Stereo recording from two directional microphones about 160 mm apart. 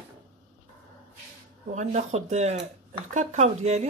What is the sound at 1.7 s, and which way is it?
Speech, 45° right (ahead or behind).